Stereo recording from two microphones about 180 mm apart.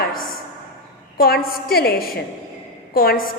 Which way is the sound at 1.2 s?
55° left (ahead or behind).